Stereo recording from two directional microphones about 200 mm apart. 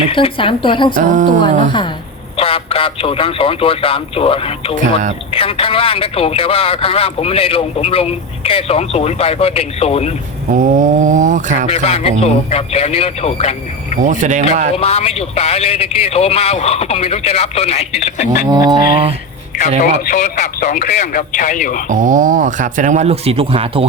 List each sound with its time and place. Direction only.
0.1 s speech: 25° left (ahead or behind)
0.9 s speech: 40° right (ahead or behind)
2.3 s speech: 30° left (ahead or behind)
10.5 s speech: 40° right (ahead or behind)
11.7 s a man's voice: 30° left (ahead or behind)
14.0 s speech: 40° right (ahead or behind)
14.8 s a man's voice: 30° left (ahead or behind)
18.4 s speech: 20° right (ahead or behind)
19.8 s a man's voice: 40° left (ahead or behind)
21.8 s speech: 40° right (ahead or behind)